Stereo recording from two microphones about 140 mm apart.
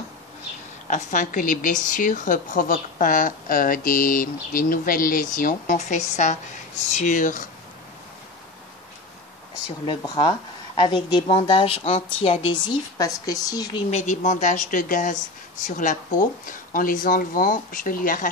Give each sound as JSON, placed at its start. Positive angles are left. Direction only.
{"t": 0.8, "sound": "a woman's voice", "side_deg": 65}
{"t": 9.8, "sound": "speech", "side_deg": 35}
{"t": 12.9, "sound": "speech", "side_deg": 25}
{"t": 13.8, "sound": "a woman's voice", "side_deg": 55}